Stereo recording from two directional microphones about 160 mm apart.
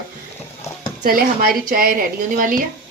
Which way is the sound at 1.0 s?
65° right (ahead or behind).